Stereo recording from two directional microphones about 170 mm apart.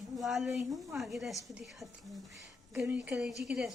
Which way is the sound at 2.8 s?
10° right (ahead or behind).